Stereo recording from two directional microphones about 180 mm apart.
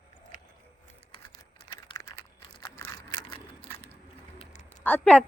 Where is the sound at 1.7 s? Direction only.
20° left (ahead or behind).